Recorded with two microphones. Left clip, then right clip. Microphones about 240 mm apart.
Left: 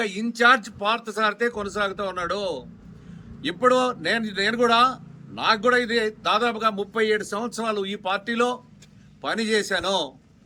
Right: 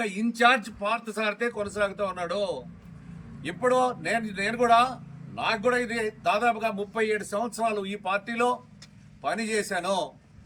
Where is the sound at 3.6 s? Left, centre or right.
Left.